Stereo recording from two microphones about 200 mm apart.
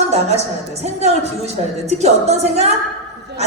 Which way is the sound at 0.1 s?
30° right (ahead or behind).